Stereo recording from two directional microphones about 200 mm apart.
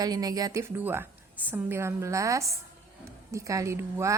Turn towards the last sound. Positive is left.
turn(degrees=-15)  # may be behind; listen again after turning